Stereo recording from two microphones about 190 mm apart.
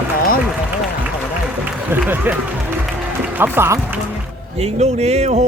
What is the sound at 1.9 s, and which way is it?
Speech, 10° right (ahead or behind).